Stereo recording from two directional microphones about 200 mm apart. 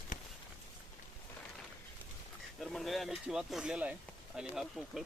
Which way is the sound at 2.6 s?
Centre (ahead or behind).